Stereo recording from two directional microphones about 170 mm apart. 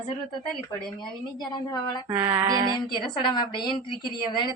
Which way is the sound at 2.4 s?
20° right (ahead or behind).